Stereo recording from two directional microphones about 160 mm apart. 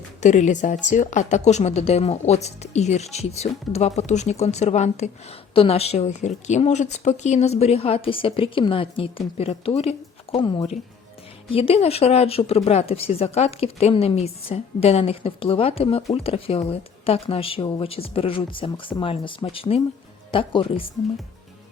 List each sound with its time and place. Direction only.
0.2 s speech: 50° left (ahead or behind)
10.3 s speech: 30° left (ahead or behind)